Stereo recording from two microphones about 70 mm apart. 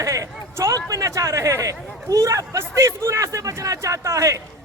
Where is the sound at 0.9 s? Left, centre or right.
Right.